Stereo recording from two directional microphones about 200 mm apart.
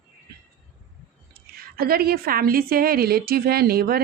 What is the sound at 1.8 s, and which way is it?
A woman's voice, 50° right (ahead or behind).